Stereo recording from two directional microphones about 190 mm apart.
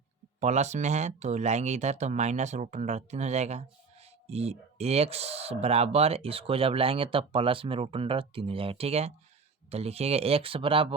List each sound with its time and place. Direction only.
0.3 s speech: 35° right (ahead or behind)